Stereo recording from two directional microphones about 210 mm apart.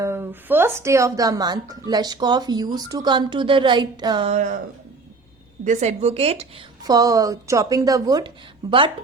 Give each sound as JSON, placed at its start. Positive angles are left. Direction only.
{"t": 0.0, "sound": "speech", "side_deg": -10}
{"t": 4.3, "sound": "speech", "side_deg": -35}
{"t": 5.6, "sound": "a woman's voice", "side_deg": -35}